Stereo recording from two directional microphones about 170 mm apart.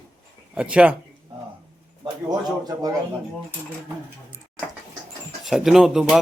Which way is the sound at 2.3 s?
25° right (ahead or behind).